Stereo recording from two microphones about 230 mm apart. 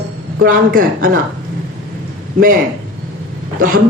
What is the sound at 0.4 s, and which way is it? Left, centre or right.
Speech, right.